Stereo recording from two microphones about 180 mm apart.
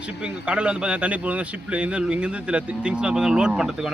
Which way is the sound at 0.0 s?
5° right (ahead or behind).